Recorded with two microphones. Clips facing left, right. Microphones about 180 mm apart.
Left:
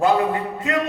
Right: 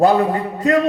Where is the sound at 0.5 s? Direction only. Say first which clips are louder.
Right 7 dB; 40° right (ahead or behind).